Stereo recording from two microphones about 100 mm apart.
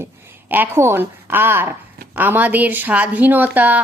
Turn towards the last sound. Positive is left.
turn(degrees=-15)  # may be behind; listen again after turning